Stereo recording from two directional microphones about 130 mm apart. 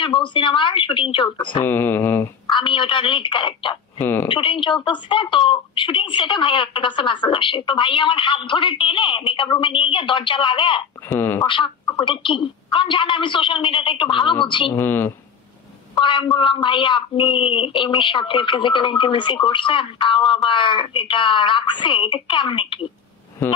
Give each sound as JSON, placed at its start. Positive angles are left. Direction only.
{"t": 0.0, "sound": "speech", "side_deg": 40}
{"t": 1.6, "sound": "mantra", "side_deg": 15}
{"t": 2.5, "sound": "speech", "side_deg": 40}
{"t": 4.0, "sound": "mantra", "side_deg": 15}
{"t": 4.3, "sound": "speech", "side_deg": 40}
{"t": 11.1, "sound": "mantra", "side_deg": 15}
{"t": 11.4, "sound": "speech", "side_deg": 40}
{"t": 14.8, "sound": "mantra", "side_deg": 15}
{"t": 15.9, "sound": "speech", "side_deg": 40}